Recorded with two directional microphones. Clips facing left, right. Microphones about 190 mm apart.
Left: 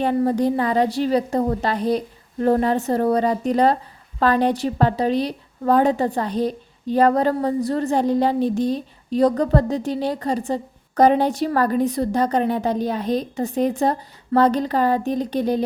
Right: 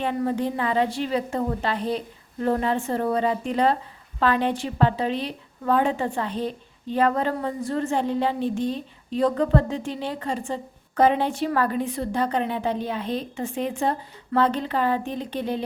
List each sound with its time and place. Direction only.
0.0 s a woman's voice: 40° left (ahead or behind)